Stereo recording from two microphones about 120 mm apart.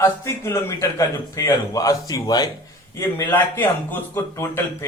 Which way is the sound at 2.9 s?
15° left (ahead or behind).